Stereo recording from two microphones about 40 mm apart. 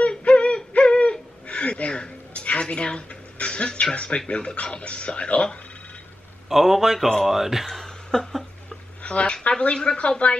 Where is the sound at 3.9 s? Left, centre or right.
Left.